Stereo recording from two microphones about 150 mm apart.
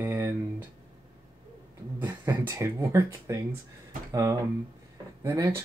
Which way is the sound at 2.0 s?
20° right (ahead or behind).